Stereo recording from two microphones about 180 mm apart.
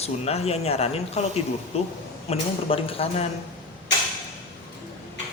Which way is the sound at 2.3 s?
30° left (ahead or behind).